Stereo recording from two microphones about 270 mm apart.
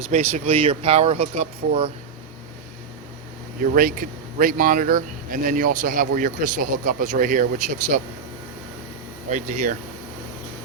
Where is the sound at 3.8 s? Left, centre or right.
Right.